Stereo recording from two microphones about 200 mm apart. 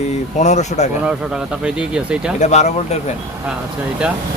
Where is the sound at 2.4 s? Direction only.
35° left (ahead or behind).